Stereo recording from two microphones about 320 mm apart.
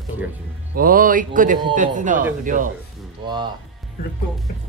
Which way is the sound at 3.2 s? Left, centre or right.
Centre.